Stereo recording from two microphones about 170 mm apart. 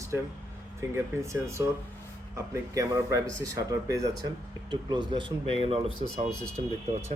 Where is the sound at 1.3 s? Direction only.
15° right (ahead or behind); by 6.3 s 35° right (ahead or behind).